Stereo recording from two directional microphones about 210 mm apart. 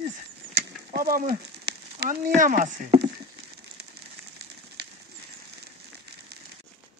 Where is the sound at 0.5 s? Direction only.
45° right (ahead or behind).